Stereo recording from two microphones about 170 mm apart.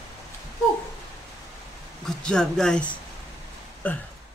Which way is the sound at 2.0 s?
5° left (ahead or behind).